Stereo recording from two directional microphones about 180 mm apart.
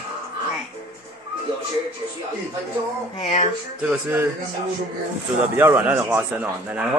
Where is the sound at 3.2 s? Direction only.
35° left (ahead or behind).